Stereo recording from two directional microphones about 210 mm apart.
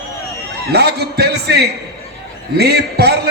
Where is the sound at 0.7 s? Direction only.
50° right (ahead or behind).